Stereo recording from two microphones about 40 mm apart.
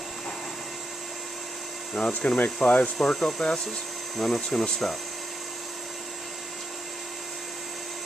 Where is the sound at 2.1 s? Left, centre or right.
Left.